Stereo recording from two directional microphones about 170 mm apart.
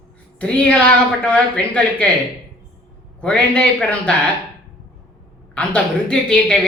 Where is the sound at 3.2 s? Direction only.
5° left (ahead or behind).